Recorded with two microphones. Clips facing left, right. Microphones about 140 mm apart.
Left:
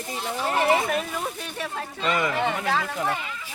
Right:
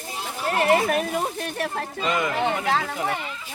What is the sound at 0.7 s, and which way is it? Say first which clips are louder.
A woman's voice: right 3 dB; 55° right (ahead or behind).